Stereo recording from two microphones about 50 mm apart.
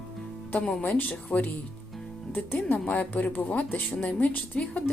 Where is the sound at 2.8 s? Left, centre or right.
Left.